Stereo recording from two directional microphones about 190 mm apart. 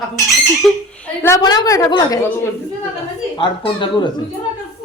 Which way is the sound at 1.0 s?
10° left (ahead or behind).